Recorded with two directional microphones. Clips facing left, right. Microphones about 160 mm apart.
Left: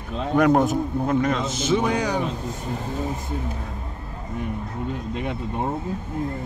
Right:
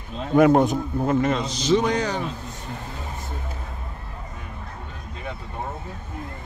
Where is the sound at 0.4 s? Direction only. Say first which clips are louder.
Right 2 dB; centre (ahead or behind).